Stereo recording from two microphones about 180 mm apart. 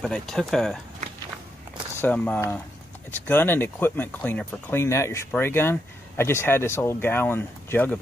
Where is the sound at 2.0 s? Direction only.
10° left (ahead or behind).